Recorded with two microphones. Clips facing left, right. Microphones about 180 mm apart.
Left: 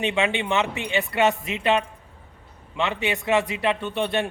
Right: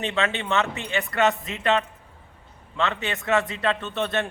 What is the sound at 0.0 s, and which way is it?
A man's voice, 15° left (ahead or behind).